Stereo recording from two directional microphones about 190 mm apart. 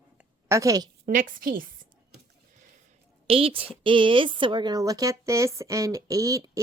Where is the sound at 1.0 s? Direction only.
45° right (ahead or behind).